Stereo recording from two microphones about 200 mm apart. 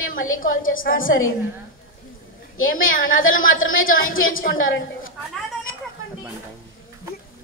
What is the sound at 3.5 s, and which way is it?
Speech, 80° left.